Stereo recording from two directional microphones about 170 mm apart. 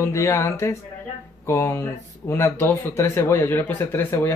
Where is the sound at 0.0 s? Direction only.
15° left (ahead or behind).